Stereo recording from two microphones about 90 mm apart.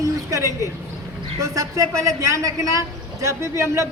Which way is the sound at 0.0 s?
35° right (ahead or behind).